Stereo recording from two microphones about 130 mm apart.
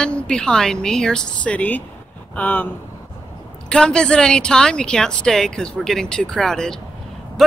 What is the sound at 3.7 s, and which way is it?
Speech, 5° left (ahead or behind).